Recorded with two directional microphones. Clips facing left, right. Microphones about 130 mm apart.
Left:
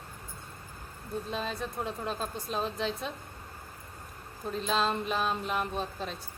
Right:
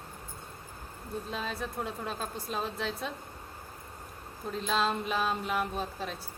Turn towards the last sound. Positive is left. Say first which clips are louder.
# even
turn(degrees=-5)  # may be behind; listen again after turning